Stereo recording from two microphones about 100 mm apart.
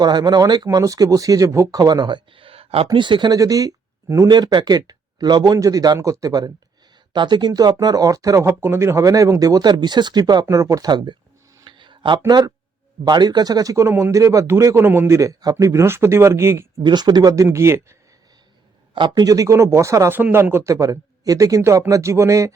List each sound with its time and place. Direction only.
0.0 s speech: 45° right (ahead or behind); by 2.8 s 75° right (ahead or behind)
2.9 s speech: 55° right (ahead or behind); by 4.3 s 35° right (ahead or behind)
4.3 s speech: 45° right (ahead or behind)
7.1 s speech: 50° right (ahead or behind)
10.4 s speech: 30° right (ahead or behind); by 11.2 s 45° right (ahead or behind)
11.6 s a sound: 55° right (ahead or behind)
13.1 s speech: 45° right (ahead or behind); by 16.6 s 25° right (ahead or behind)
16.8 s speech: 45° right (ahead or behind); by 17.9 s 25° right (ahead or behind)
18.9 s speech: 50° right (ahead or behind)
19.2 s speech: 35° right (ahead or behind)